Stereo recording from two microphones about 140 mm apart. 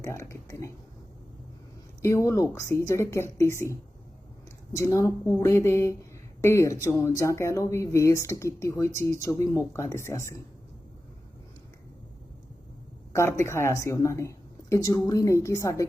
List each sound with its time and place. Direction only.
0.0 s speech: 20° left (ahead or behind)
2.0 s speech: 20° left (ahead or behind)
13.1 s speech: 20° left (ahead or behind)